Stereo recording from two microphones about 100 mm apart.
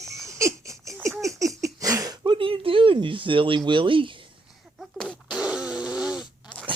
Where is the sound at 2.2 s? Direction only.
60° right (ahead or behind).